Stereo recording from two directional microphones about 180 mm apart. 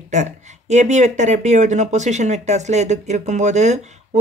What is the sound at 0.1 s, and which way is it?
Speech, 40° right (ahead or behind).